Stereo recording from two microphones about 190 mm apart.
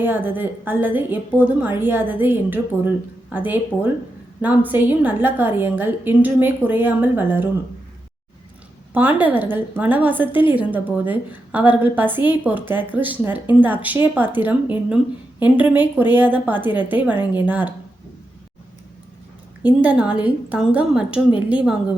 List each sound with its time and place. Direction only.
0.0 s a woman's voice: 10° right (ahead or behind)
8.9 s a woman's voice: 10° right (ahead or behind)
19.6 s a woman's voice: 20° left (ahead or behind)
20.2 s a woman's voice: 5° right (ahead or behind)